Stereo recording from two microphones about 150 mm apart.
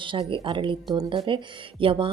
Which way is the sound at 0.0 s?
35° right (ahead or behind).